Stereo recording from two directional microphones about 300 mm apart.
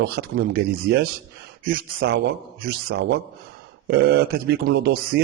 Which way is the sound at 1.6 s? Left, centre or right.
Right.